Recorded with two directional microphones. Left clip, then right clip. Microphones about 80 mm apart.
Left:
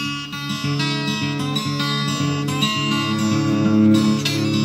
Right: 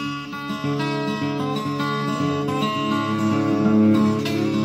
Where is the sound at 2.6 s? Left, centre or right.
Left.